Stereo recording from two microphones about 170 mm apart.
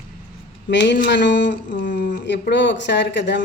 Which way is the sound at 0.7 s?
90° left.